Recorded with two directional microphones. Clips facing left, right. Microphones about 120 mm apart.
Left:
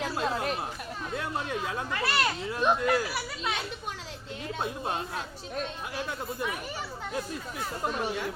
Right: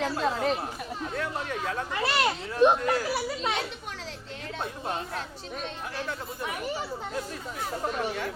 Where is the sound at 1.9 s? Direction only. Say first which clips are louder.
Right 2 dB; 20° right (ahead or behind).